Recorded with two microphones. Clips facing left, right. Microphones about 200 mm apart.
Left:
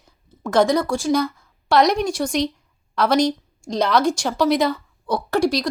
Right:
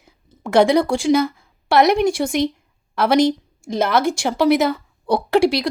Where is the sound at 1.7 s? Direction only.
5° right (ahead or behind).